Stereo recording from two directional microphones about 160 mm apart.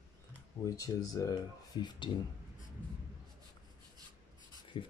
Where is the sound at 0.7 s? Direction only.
20° left (ahead or behind).